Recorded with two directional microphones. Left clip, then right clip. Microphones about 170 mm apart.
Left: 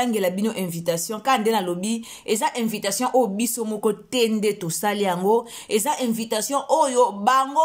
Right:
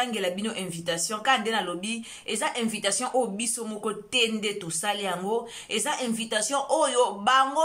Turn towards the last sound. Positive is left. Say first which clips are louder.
# left 2 dB
turn(degrees=25)  # may be behind; listen again after turning